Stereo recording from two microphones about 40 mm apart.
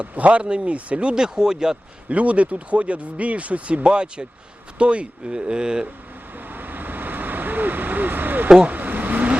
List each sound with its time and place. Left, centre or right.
0.0 s speech: right; by 1.8 s centre
2.0 s speech: right
6.5 s vehicle: right